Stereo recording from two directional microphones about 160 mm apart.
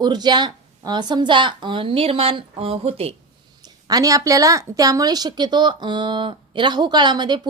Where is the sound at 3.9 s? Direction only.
20° right (ahead or behind).